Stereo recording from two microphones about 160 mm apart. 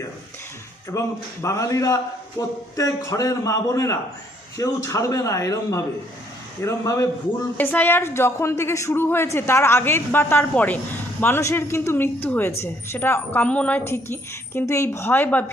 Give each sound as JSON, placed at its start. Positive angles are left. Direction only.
{"t": 0.9, "sound": "a man's voice", "side_deg": 20}